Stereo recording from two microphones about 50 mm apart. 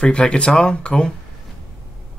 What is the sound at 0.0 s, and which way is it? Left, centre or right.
Speech, centre.